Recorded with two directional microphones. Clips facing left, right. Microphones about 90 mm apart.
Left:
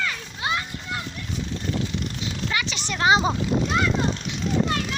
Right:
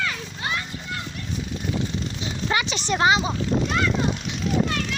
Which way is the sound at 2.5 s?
25° right (ahead or behind).